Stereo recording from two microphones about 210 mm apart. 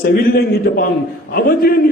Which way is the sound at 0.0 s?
45° left (ahead or behind).